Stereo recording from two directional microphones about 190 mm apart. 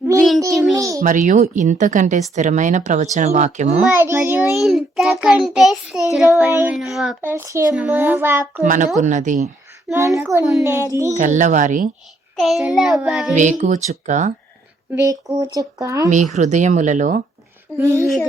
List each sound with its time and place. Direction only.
0.1 s a child's voice: 15° right (ahead or behind)
1.0 s speech: 45° right (ahead or behind)
3.9 s speech: 10° right (ahead or behind)
4.5 s child singing: centre (ahead or behind)
6.1 s speech: centre (ahead or behind)
8.6 s speech: 45° right (ahead or behind)
10.6 s speech: 15° right (ahead or behind)
11.1 s speech: 40° right (ahead or behind)
12.4 s child singing: centre (ahead or behind)
13.3 s speech: 40° right (ahead or behind)
14.9 s speech: 15° right (ahead or behind)
16.0 s speech: 40° right (ahead or behind)
17.7 s speech: 15° right (ahead or behind)